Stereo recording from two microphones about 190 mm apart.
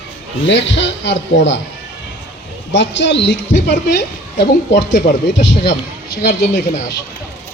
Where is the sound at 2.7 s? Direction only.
75° left (ahead or behind).